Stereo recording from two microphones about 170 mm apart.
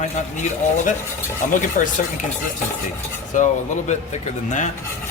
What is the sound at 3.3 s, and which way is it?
A man's voice, 50° left (ahead or behind).